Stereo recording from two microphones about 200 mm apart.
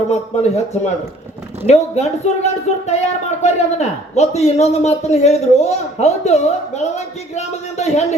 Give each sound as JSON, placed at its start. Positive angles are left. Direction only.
{"t": 0.1, "sound": "a man's voice", "side_deg": 35}
{"t": 1.6, "sound": "a man's voice", "side_deg": 35}